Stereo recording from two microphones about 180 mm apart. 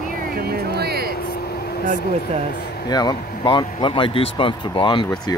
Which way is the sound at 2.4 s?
60° left (ahead or behind).